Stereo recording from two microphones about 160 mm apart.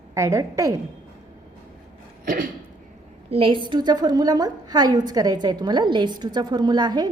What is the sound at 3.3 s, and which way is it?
A woman's voice, 35° right (ahead or behind).